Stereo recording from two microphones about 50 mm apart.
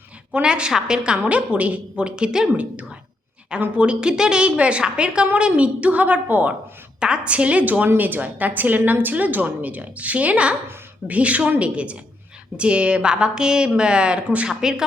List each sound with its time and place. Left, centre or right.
0.4 s a woman's voice: centre
1.3 s a woman's voice: right
2.5 s a woman's voice: right
7.0 s a woman's voice: right